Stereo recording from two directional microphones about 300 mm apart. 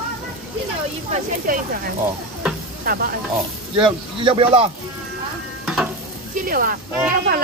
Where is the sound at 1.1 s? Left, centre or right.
Right.